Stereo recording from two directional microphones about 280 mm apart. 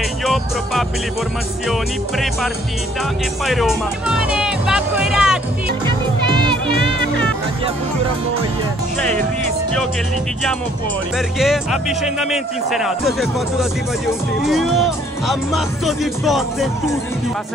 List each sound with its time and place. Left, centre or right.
0.2 s music: centre
1.7 s speech: centre
5.9 s music: centre
11.1 s speech: centre